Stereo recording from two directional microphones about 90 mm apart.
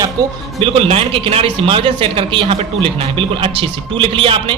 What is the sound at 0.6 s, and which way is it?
Speech, 90° right.